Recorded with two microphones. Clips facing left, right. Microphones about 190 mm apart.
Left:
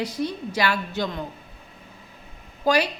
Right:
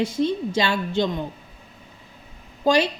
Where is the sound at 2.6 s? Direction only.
25° right (ahead or behind).